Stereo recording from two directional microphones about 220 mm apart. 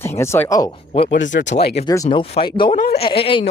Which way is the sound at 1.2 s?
35° left (ahead or behind).